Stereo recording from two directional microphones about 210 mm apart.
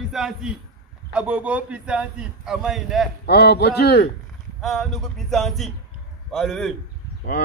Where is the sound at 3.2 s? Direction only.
50° left (ahead or behind).